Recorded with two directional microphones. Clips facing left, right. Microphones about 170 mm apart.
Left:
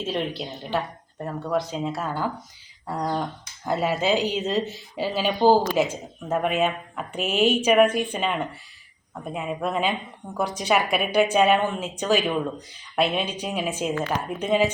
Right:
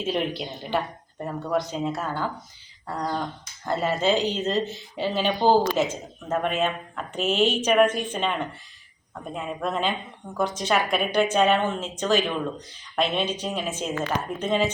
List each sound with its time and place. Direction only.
0.0 s speech: centre (ahead or behind)